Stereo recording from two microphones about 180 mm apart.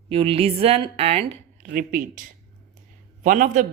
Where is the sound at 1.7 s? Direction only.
50° right (ahead or behind).